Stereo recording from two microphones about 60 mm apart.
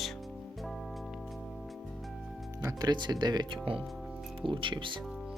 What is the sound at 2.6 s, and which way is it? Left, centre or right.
Speech, right.